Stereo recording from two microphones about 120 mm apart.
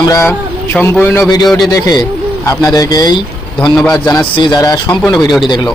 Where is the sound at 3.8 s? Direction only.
10° left (ahead or behind).